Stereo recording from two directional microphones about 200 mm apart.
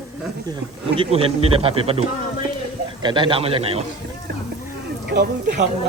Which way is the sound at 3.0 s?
25° right (ahead or behind).